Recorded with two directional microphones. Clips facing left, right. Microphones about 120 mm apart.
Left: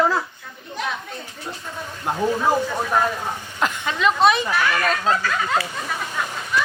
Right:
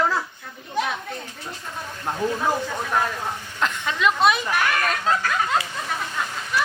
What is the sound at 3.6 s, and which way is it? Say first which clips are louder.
Speech: left 2 dB; 5° left (ahead or behind).